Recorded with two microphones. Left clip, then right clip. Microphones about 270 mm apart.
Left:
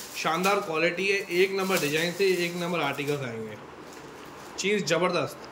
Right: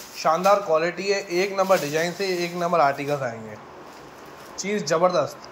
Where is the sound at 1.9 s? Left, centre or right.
Right.